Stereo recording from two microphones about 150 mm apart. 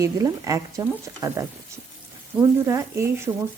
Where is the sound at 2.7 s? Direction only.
15° right (ahead or behind).